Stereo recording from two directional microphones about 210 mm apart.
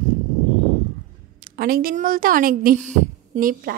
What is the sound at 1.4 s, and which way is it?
A woman's voice, 45° right (ahead or behind).